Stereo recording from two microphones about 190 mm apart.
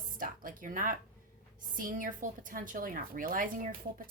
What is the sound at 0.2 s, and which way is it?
Music, 45° right (ahead or behind).